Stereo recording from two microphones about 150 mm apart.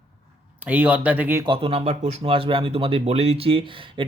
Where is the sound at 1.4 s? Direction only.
35° right (ahead or behind).